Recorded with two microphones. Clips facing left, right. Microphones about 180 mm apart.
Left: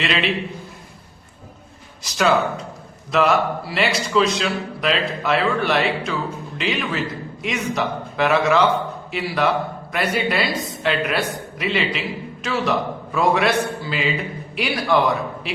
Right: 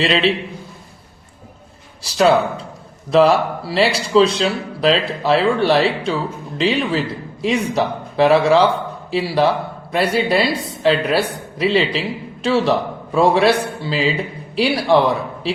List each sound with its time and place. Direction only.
0.0 s a man's voice: 30° right (ahead or behind)
2.0 s a man's voice: 30° right (ahead or behind)